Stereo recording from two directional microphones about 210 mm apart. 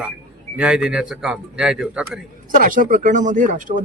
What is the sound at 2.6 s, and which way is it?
Speech, 40° right (ahead or behind).